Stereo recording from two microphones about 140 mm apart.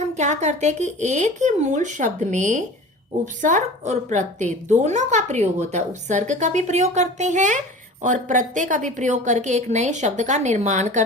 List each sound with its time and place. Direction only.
0.0 s a woman's voice: 55° right (ahead or behind)